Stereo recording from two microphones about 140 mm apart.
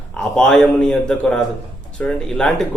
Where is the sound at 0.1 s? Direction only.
5° left (ahead or behind).